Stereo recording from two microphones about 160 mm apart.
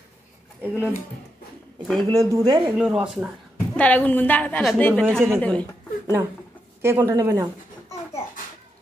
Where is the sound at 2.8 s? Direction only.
5° right (ahead or behind).